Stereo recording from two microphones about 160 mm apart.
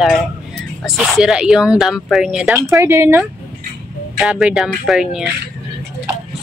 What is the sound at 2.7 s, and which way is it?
Speech, 20° right (ahead or behind).